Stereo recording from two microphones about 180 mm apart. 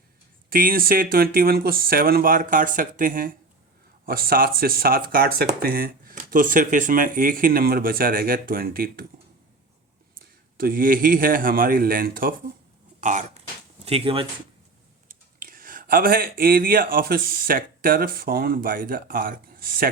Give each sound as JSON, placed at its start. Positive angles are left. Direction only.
{"t": 0.5, "sound": "speech", "side_deg": -50}
{"t": 10.6, "sound": "speech", "side_deg": -50}
{"t": 13.0, "sound": "speech", "side_deg": -40}
{"t": 13.8, "sound": "speech", "side_deg": -30}
{"t": 15.4, "sound": "speech", "side_deg": -50}